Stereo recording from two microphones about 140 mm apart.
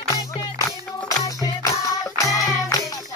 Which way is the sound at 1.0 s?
25° left (ahead or behind).